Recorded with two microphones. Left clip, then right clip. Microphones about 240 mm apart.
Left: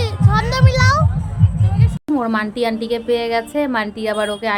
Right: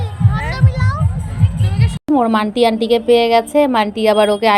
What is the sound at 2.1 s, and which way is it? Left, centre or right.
Speech, centre.